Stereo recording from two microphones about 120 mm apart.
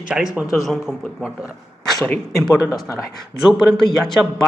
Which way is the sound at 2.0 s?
10° left (ahead or behind).